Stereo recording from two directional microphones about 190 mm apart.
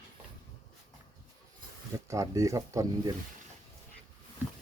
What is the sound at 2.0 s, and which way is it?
Speech, 15° right (ahead or behind).